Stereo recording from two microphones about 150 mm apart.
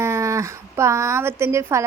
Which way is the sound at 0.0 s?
20° right (ahead or behind).